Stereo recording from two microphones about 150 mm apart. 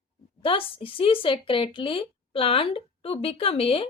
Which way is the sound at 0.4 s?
35° left (ahead or behind).